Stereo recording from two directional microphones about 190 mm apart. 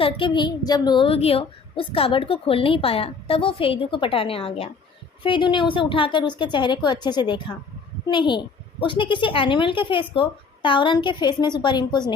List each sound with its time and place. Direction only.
0.0 s a woman's voice: 25° left (ahead or behind)